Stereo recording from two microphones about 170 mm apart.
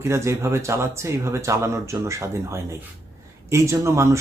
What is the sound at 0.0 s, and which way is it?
Speech, 15° right (ahead or behind).